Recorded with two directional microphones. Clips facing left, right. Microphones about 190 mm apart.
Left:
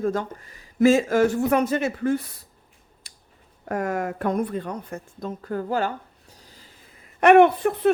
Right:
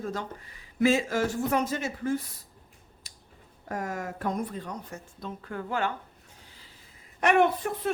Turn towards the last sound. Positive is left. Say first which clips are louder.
# left 9 dB
turn(degrees=65)  # may be behind; listen again after turning